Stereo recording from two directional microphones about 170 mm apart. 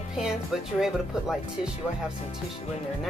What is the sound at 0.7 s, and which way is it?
Speech, 5° right (ahead or behind).